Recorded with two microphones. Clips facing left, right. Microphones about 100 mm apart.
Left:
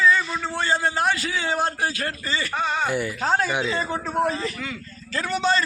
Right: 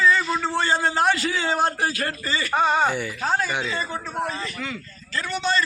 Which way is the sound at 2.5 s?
15° right (ahead or behind).